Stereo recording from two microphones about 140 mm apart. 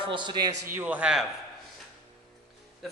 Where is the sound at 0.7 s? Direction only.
10° right (ahead or behind).